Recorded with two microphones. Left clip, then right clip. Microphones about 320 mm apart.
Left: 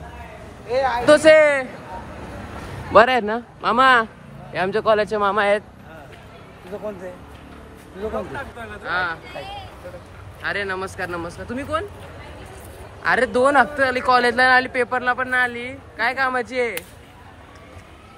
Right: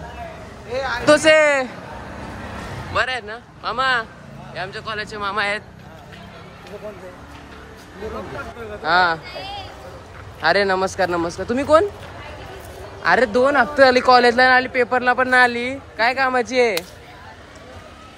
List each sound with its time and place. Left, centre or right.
0.7 s a sound: left
1.0 s a man's voice: centre
2.9 s speech: centre
8.8 s speech: centre
13.0 s speech: centre